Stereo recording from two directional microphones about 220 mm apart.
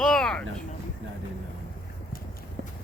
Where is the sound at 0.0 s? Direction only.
Centre (ahead or behind).